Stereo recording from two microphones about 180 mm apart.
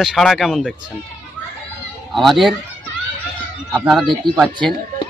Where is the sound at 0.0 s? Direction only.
Centre (ahead or behind).